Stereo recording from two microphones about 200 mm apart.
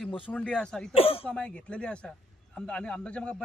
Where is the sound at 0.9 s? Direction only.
30° left (ahead or behind).